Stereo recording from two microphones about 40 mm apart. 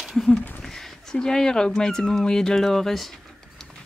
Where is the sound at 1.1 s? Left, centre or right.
Centre.